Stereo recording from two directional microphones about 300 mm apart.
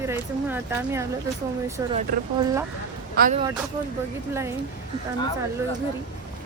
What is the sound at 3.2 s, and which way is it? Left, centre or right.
Speech, right.